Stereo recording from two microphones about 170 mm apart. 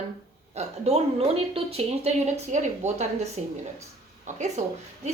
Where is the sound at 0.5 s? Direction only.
40° right (ahead or behind).